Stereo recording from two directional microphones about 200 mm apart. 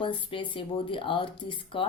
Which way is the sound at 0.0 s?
25° left (ahead or behind).